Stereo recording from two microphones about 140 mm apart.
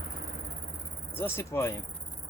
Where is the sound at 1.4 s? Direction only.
15° left (ahead or behind).